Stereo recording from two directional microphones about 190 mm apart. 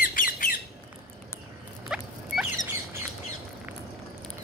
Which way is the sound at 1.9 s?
5° right (ahead or behind).